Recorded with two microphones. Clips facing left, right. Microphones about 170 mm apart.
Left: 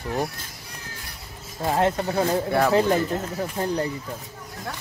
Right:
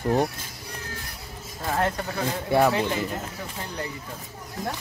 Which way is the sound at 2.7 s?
45° left (ahead or behind).